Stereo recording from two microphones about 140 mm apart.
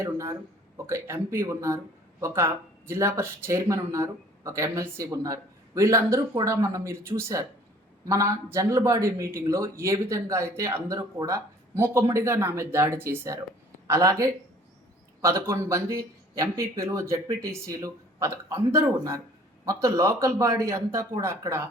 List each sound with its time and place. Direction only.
0.0 s speech: 20° right (ahead or behind)